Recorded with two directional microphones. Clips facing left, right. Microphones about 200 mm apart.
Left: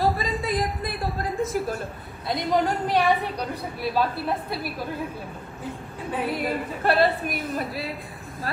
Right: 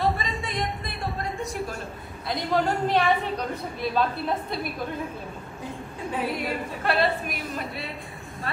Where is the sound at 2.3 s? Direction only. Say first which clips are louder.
Left 1 dB; 15° left (ahead or behind).